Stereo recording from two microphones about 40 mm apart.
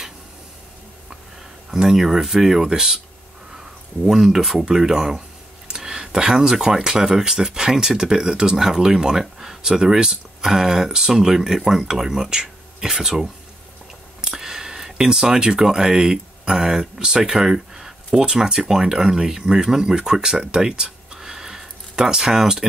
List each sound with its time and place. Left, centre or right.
1.7 s speech: centre